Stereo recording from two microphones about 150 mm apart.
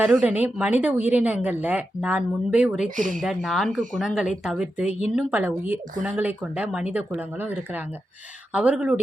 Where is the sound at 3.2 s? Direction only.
Centre (ahead or behind).